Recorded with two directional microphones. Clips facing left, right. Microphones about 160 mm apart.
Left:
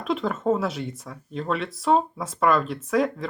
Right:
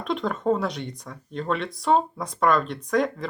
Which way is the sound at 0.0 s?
Centre (ahead or behind).